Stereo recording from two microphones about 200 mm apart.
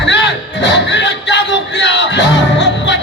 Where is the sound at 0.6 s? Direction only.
65° left (ahead or behind).